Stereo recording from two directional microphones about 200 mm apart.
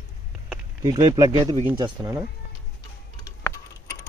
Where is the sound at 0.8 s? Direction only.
20° right (ahead or behind).